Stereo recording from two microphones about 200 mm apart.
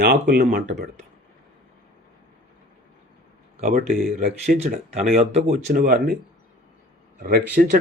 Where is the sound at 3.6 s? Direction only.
45° right (ahead or behind).